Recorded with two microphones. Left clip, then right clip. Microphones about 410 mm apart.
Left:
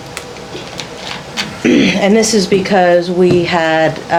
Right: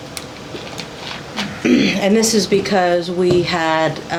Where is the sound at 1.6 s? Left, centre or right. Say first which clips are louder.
Left 4 dB; left.